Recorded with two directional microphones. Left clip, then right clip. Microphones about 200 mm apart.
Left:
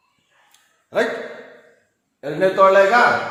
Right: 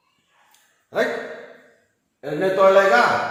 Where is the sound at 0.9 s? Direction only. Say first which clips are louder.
Left 2 dB; 40° left (ahead or behind).